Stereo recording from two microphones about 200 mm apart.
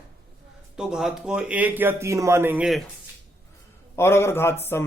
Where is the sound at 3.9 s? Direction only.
15° left (ahead or behind).